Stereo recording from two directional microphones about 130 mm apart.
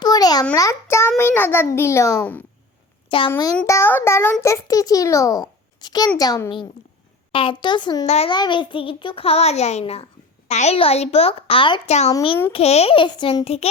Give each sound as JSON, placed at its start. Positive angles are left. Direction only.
{"t": 0.0, "sound": "a sound", "side_deg": 30}
{"t": 0.5, "sound": "a child's voice", "side_deg": 25}
{"t": 3.1, "sound": "a child's voice", "side_deg": 45}
{"t": 3.7, "sound": "a child's voice", "side_deg": 15}
{"t": 8.0, "sound": "a child's voice", "side_deg": 55}
{"t": 8.3, "sound": "a child's voice", "side_deg": 35}
{"t": 11.9, "sound": "a child's voice", "side_deg": 55}
{"t": 13.4, "sound": "a child's voice", "side_deg": 50}